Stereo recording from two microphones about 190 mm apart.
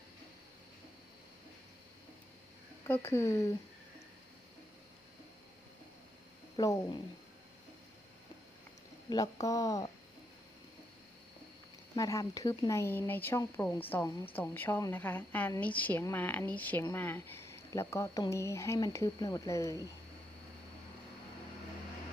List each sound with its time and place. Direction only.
2.8 s a woman's voice: 10° left (ahead or behind)
6.6 s a woman's voice: 20° left (ahead or behind)
9.0 s speech: 20° left (ahead or behind)
11.9 s a woman's voice: 15° left (ahead or behind)